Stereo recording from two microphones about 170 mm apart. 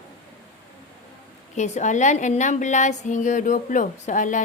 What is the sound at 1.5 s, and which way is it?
A woman's voice, 45° left (ahead or behind).